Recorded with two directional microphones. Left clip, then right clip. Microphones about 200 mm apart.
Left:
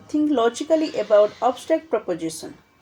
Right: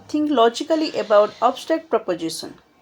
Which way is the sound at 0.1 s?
15° right (ahead or behind).